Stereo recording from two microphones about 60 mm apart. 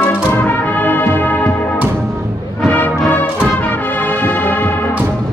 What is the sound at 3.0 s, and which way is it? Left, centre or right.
Music, left.